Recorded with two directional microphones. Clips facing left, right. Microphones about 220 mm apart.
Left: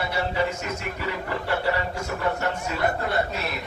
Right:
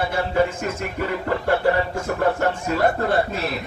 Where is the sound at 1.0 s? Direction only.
50° right (ahead or behind).